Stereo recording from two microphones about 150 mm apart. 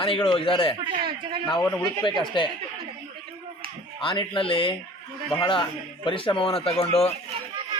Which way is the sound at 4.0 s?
35° left (ahead or behind).